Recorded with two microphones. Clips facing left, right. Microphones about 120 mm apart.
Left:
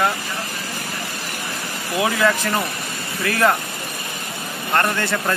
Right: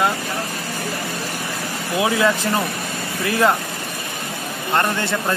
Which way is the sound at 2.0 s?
20° right (ahead or behind).